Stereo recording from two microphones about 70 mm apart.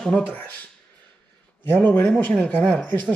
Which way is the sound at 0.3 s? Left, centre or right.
Left.